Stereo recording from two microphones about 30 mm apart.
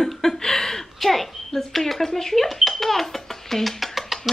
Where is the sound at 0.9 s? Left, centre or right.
Centre.